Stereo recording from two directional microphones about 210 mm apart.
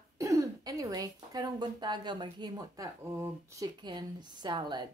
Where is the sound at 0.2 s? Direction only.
15° right (ahead or behind).